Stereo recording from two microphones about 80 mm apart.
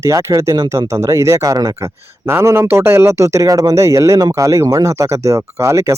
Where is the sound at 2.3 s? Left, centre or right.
Right.